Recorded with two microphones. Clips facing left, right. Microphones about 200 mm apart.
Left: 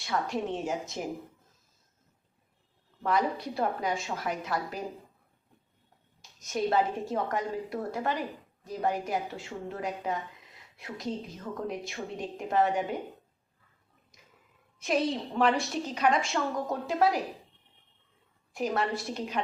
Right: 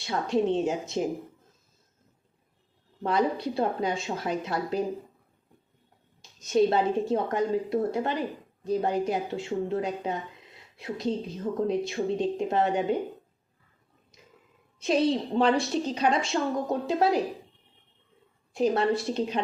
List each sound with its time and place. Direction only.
0.0 s a woman's voice: 25° right (ahead or behind)
3.0 s a woman's voice: 30° right (ahead or behind)
6.5 s a woman's voice: 25° right (ahead or behind)
14.8 s a woman's voice: 30° right (ahead or behind)
18.5 s a woman's voice: 30° right (ahead or behind)